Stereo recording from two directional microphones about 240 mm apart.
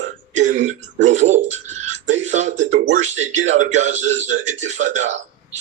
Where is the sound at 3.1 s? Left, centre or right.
Right.